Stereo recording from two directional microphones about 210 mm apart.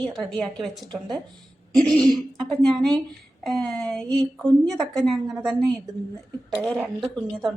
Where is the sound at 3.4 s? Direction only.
Centre (ahead or behind).